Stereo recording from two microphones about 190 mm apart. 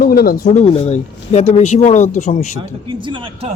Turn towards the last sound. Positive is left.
turn(degrees=-30)  # may be behind; listen again after turning